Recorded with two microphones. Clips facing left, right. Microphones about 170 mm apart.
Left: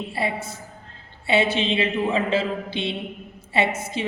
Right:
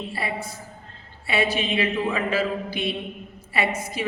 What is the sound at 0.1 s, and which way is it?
A woman's voice, 25° left (ahead or behind).